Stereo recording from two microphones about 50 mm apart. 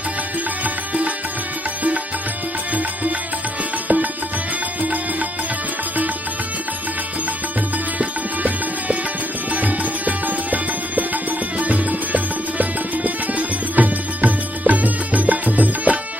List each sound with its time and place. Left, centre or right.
0.6 s music: right
3.8 s music: right
9.5 s music: right